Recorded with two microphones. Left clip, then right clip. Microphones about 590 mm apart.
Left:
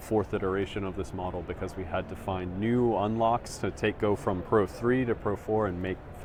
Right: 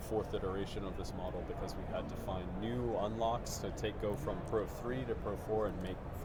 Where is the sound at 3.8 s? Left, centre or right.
Left.